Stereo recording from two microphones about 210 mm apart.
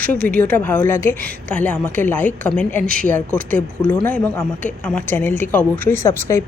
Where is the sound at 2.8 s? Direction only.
45° right (ahead or behind).